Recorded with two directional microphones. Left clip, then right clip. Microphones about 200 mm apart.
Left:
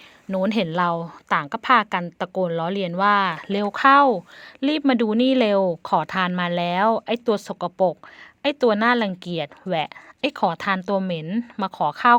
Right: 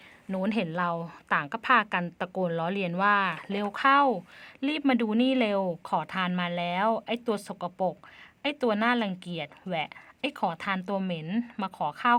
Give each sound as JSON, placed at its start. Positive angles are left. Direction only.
{"t": 0.3, "sound": "speech", "side_deg": 30}
{"t": 11.3, "sound": "speech", "side_deg": 15}
{"t": 11.6, "sound": "speech", "side_deg": 30}